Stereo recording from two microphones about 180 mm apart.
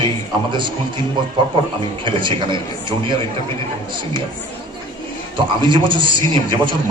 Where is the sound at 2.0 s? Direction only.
25° right (ahead or behind).